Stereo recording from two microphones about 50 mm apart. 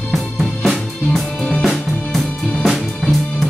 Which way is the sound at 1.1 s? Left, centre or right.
Left.